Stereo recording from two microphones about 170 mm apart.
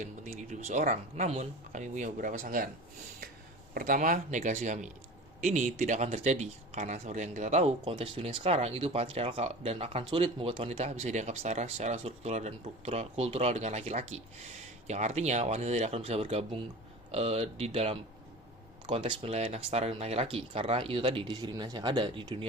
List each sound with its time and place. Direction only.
0.0 s speech: 45° right (ahead or behind)
3.8 s speech: 50° right (ahead or behind); by 22.4 s 30° right (ahead or behind)